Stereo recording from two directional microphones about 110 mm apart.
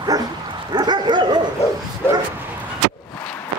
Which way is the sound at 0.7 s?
40° right (ahead or behind).